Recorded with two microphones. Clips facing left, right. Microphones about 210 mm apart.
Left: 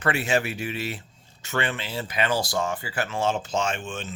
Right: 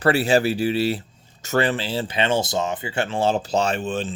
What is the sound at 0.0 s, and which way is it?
Speech, 35° right (ahead or behind).